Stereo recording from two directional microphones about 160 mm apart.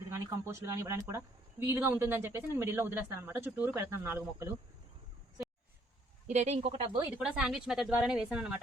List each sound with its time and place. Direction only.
0.1 s speech: 15° right (ahead or behind)
6.2 s speech: 45° right (ahead or behind)
7.2 s speech: 5° right (ahead or behind)